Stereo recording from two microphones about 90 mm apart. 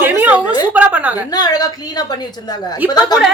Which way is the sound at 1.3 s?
45° left (ahead or behind).